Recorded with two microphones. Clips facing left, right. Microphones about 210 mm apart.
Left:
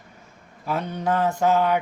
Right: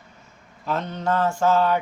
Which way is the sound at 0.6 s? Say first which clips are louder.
Even; 10° left (ahead or behind).